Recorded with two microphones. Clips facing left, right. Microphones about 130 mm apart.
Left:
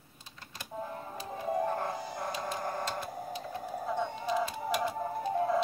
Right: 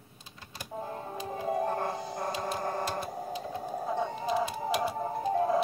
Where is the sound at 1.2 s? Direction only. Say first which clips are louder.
Right 1 dB; 20° right (ahead or behind).